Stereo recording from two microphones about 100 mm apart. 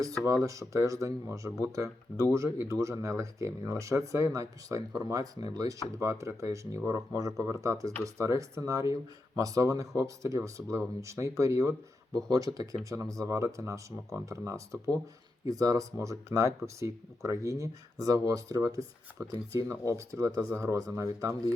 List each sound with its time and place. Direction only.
0.3 s speech: 35° right (ahead or behind)